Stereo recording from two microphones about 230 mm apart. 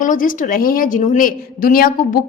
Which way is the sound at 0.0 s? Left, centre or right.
Left.